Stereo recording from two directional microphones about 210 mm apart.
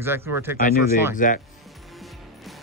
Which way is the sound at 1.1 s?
40° left (ahead or behind).